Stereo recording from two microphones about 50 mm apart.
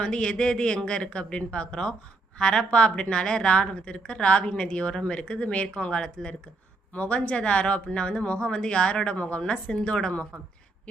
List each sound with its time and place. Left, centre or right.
0.0 s a woman's voice: centre